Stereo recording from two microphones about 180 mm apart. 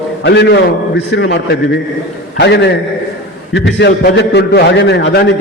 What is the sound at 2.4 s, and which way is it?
A man's voice, 70° left (ahead or behind).